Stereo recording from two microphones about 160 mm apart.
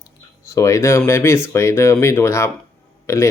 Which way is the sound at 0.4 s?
20° left (ahead or behind).